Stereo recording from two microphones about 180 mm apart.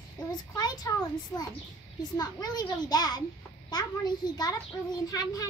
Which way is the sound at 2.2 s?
20° left (ahead or behind).